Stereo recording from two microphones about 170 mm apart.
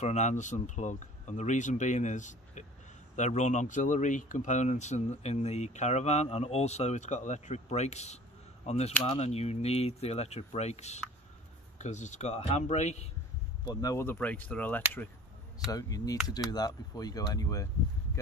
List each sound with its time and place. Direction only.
0.0 s speech: 45° left (ahead or behind)
13.7 s speech: 20° left (ahead or behind)
15.7 s speech: 20° left (ahead or behind)